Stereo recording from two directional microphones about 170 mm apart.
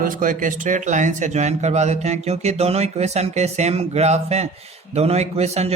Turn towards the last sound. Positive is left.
turn(degrees=-40)  # may be behind; listen again after turning